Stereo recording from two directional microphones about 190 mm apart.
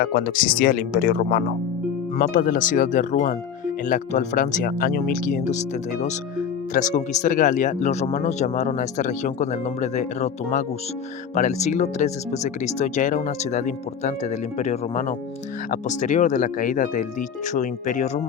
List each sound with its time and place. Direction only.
0.0 s speech: 50° left (ahead or behind)